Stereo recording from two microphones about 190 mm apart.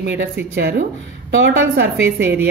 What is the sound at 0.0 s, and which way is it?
Speech, 60° right (ahead or behind).